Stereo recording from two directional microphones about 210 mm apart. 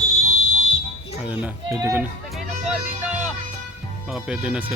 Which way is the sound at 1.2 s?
10° right (ahead or behind).